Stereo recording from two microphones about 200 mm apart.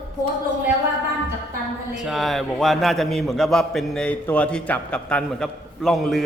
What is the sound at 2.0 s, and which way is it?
A man's voice, centre (ahead or behind).